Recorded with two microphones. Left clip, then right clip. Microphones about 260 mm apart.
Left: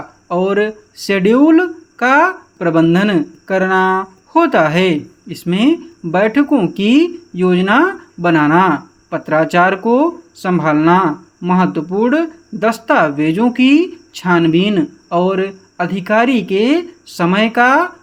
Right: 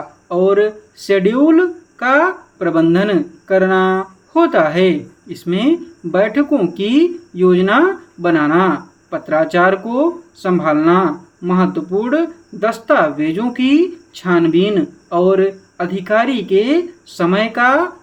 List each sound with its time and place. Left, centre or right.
0.3 s speech: left